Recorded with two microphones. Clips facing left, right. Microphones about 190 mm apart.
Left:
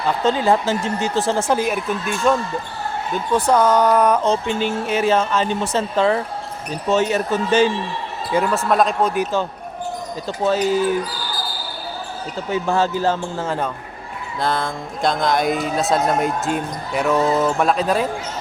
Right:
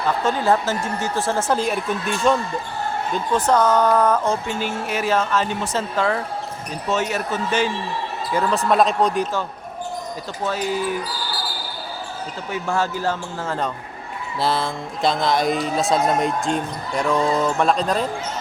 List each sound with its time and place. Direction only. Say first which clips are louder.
0.3 s speech: left 3 dB; 20° left (ahead or behind)
1.6 s a man's voice: left 1 dB; 5° left (ahead or behind)
3.3 s speech: left 2 dB; 10° left (ahead or behind); by 7.7 s 30° left (ahead or behind)
8.4 s a man's voice: right 2 dB; centre (ahead or behind)
10.2 s speech: left 8 dB; 30° left (ahead or behind)
12.7 s speech: left 3 dB; 25° left (ahead or behind)
14.4 s a man's voice: even; 5° right (ahead or behind)